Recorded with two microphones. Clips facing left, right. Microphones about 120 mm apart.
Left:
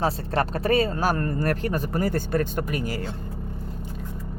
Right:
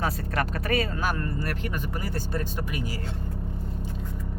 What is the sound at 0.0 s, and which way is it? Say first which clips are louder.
Speech: left 4 dB; 30° left (ahead or behind).